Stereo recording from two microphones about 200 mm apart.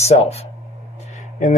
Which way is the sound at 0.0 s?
30° left (ahead or behind).